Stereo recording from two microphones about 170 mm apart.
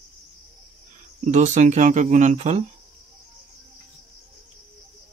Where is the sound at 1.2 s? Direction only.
45° right (ahead or behind).